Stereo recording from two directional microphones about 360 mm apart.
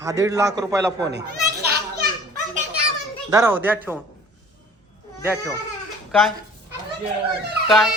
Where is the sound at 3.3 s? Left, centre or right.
Centre.